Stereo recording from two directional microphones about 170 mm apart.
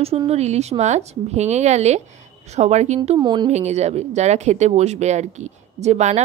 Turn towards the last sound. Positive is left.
turn(degrees=-40)  # may be behind; listen again after turning